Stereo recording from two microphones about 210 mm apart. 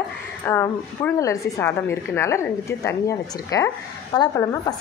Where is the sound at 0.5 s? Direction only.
10° left (ahead or behind).